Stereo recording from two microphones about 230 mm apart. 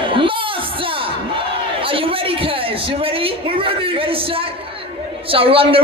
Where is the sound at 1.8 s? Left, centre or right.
Right.